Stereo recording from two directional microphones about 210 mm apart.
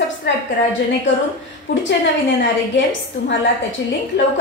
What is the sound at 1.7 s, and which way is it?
Speech, 60° left (ahead or behind).